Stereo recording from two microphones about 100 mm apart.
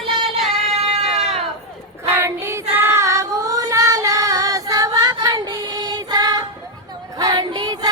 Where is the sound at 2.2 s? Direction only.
30° right (ahead or behind).